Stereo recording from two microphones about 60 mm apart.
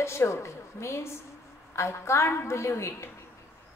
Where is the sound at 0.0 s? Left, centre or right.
Left.